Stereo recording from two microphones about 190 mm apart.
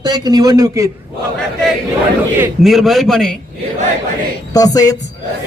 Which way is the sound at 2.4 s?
Centre (ahead or behind).